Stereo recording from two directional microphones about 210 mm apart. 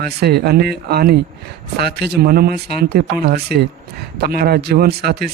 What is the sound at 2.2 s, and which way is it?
Speech, 45° right (ahead or behind).